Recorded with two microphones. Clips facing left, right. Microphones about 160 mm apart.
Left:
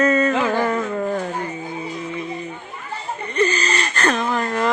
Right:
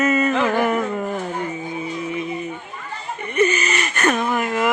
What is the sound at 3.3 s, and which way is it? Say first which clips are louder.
Whimper: right 1 dB; 20° right (ahead or behind).